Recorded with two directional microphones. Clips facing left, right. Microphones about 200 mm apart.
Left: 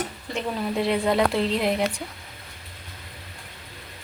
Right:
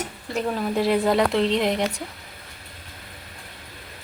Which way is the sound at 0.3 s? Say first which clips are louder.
Right 3 dB; centre (ahead or behind).